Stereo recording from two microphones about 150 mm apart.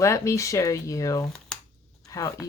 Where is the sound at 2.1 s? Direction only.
20° left (ahead or behind).